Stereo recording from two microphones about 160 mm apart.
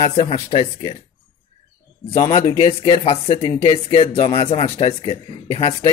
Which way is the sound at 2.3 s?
35° left (ahead or behind).